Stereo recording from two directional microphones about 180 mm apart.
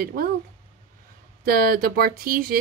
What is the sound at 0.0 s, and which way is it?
Speech, 55° right (ahead or behind).